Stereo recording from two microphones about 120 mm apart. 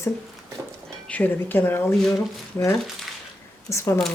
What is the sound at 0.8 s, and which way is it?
Speech, 10° left (ahead or behind).